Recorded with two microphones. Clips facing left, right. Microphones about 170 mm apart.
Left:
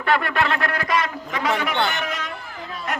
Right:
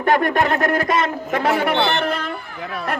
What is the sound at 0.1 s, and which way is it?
A man's voice, 45° right (ahead or behind).